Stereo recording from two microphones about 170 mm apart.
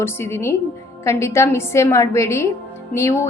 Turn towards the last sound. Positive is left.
turn(degrees=15)  # may be behind; listen again after turning